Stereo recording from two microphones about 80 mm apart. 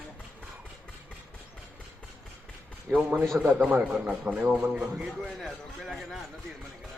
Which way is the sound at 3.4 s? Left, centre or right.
Right.